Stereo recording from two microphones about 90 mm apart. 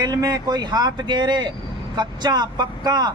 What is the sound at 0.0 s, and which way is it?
Speech, 45° right (ahead or behind).